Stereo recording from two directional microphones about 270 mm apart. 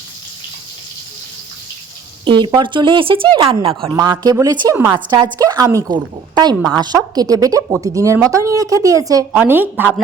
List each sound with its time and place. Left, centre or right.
2.2 s speech: centre